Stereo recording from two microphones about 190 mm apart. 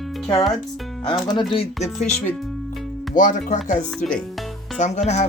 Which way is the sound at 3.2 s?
40° left (ahead or behind).